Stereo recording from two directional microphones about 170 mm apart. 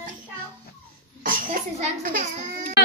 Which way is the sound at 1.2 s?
55° right (ahead or behind).